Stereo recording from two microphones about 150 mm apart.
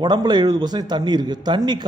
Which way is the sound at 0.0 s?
30° right (ahead or behind).